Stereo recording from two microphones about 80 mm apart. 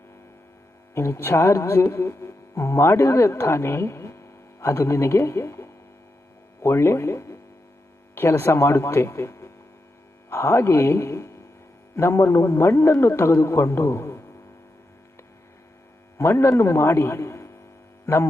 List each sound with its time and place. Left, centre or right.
0.9 s speech: left
16.1 s speech: left